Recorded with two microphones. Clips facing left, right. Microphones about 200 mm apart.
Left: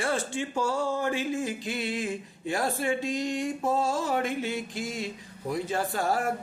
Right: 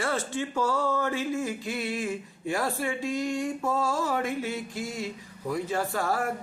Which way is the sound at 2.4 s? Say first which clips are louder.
Left 1 dB; 30° left (ahead or behind).